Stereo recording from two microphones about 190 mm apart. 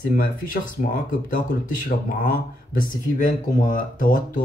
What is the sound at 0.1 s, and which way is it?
Speech, 45° left (ahead or behind).